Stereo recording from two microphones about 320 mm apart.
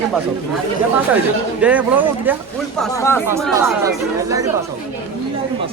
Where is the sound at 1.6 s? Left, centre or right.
Centre.